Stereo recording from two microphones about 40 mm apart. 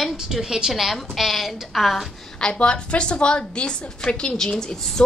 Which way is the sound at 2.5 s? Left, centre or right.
Left.